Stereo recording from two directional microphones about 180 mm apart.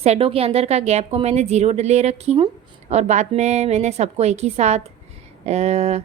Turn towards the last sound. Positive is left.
turn(degrees=-35)  # may be behind; listen again after turning